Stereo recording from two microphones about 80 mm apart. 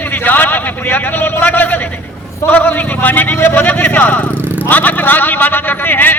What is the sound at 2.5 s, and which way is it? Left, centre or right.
A man's voice, left.